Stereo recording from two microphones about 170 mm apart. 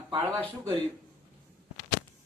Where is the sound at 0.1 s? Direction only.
35° right (ahead or behind).